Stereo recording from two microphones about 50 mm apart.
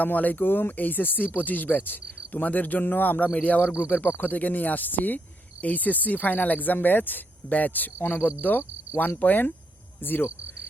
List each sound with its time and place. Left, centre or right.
0.0 s speech: left